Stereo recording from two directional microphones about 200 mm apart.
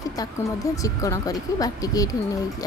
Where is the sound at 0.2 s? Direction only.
15° left (ahead or behind).